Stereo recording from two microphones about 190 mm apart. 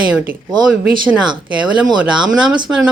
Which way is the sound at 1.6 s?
5° right (ahead or behind).